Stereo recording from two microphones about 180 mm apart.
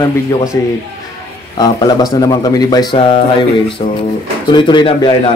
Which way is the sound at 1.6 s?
20° left (ahead or behind).